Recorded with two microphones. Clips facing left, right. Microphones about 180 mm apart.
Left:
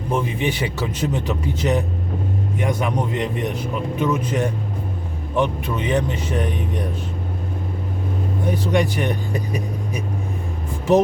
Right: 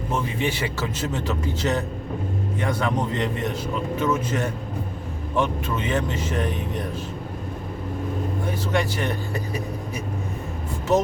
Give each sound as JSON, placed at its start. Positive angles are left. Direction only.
{"t": 0.1, "sound": "a man's voice", "side_deg": 15}
{"t": 8.4, "sound": "a man's voice", "side_deg": 15}